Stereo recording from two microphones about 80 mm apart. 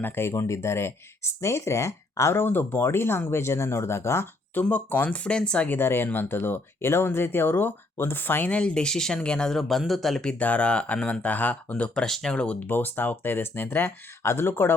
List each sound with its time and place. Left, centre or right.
0.0 s speech: left
4.6 s speech: left
5.7 s speech: left